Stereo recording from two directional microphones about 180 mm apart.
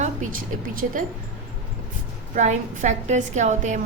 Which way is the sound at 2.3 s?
45° right (ahead or behind).